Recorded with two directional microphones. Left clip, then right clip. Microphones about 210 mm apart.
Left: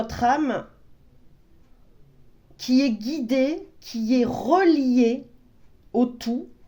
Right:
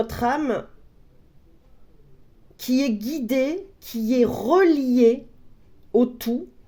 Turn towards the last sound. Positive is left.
turn(degrees=-40)  # may be behind; listen again after turning